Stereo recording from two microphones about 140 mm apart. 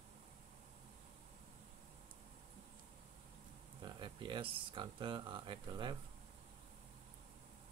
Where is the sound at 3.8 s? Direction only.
35° right (ahead or behind).